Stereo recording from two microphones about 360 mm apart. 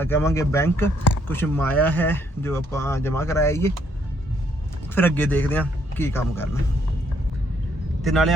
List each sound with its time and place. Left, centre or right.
0.0 s speech: centre
4.9 s speech: centre
8.0 s speech: centre